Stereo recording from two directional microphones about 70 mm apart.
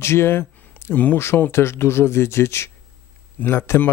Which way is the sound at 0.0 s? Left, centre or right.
Left.